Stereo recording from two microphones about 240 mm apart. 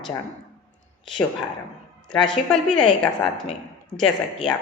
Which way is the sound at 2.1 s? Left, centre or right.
Centre.